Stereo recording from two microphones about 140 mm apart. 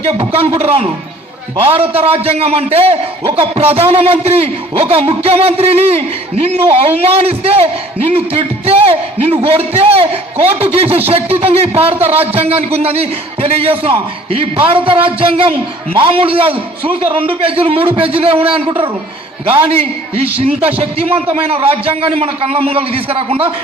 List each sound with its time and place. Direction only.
0.6 s a man's voice: 40° right (ahead or behind)